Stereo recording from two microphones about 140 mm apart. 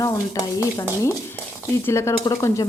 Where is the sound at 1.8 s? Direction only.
20° left (ahead or behind).